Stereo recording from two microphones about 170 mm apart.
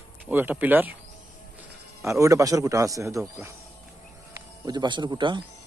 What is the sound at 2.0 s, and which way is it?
Speech, 15° right (ahead or behind).